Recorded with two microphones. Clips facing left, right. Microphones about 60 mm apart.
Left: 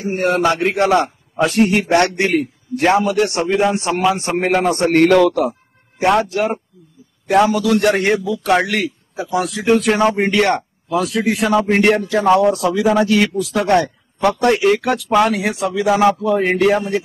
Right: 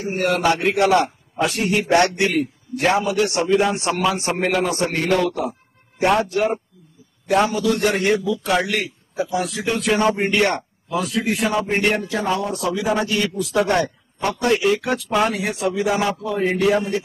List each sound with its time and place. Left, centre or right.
0.2 s a man's voice: left
4.5 s a man's voice: left
5.1 s a man's voice: left
6.0 s a man's voice: left
13.5 s a man's voice: left
15.1 s speech: left